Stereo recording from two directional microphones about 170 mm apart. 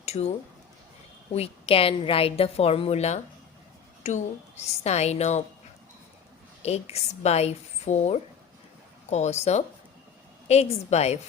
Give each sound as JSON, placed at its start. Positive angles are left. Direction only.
{"t": 0.0, "sound": "a woman's voice", "side_deg": 40}
{"t": 6.6, "sound": "a woman's voice", "side_deg": 40}